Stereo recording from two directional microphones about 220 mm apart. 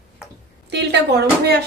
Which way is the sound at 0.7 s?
50° right (ahead or behind).